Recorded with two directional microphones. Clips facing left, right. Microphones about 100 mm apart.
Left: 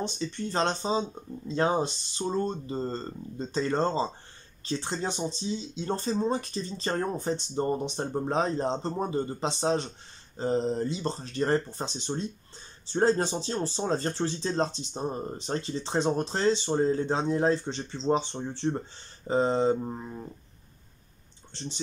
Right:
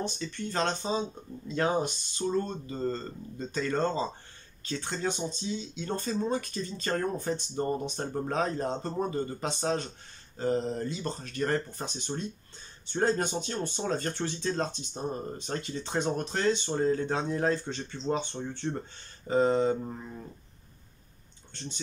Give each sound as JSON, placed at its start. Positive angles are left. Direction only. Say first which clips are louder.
{"t": 0.0, "sound": "speech", "louder": "left 2 dB", "side_deg": 25}